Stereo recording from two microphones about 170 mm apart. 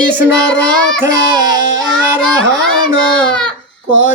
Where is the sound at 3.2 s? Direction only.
5° left (ahead or behind).